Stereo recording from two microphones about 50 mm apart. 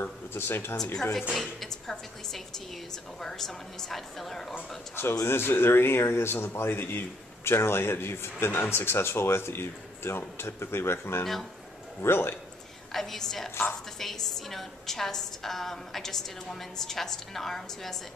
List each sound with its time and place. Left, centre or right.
0.0 s speech: left
1.3 s a woman's voice: centre
4.9 s speech: left
12.9 s a woman's voice: centre